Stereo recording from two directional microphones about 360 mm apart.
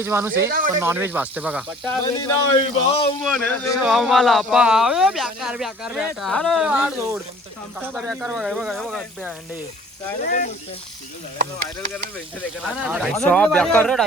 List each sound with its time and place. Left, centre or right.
0.0 s speech: centre
0.3 s speech: right
0.8 s speech: centre
2.1 s a man's voice: centre
3.2 s speech: centre
10.2 s speech: left
12.6 s speech: centre